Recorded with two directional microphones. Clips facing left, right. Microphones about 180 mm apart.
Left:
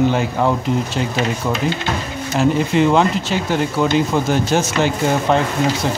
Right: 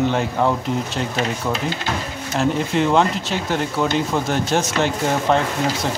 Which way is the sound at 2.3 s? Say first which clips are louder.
Left 4 dB; centre (ahead or behind).